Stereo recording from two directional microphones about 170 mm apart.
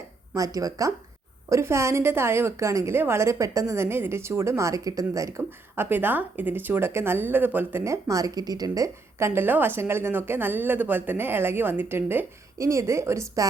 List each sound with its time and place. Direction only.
0.3 s speech: 20° right (ahead or behind)